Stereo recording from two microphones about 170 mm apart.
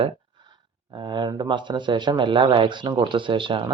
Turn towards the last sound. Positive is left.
turn(degrees=-30)  # may be behind; listen again after turning